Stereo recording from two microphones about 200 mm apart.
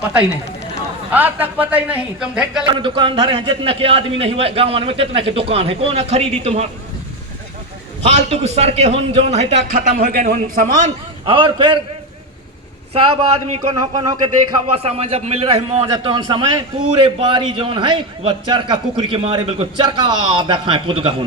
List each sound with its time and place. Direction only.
1.1 s a man's voice: 10° right (ahead or behind)
2.7 s a man's voice: 25° right (ahead or behind)
8.0 s a man's voice: 30° right (ahead or behind)
9.7 s a man's voice: 50° right (ahead or behind)
11.3 s a man's voice: 25° right (ahead or behind)
12.9 s a man's voice: 30° right (ahead or behind)
13.7 s a man's voice: 20° right (ahead or behind)
14.8 s a man's voice: 30° right (ahead or behind)